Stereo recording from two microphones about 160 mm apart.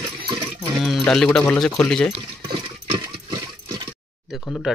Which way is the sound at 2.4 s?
30° right (ahead or behind).